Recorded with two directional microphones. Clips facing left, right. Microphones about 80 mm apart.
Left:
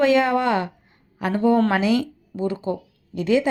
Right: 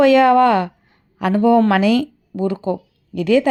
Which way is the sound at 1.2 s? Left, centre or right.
Right.